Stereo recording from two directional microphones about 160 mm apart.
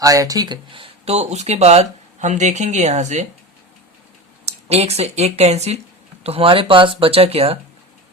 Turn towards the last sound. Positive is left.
turn(degrees=-40)  # may be behind; listen again after turning